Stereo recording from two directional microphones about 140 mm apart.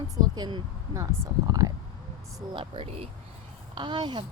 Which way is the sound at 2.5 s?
40° right (ahead or behind).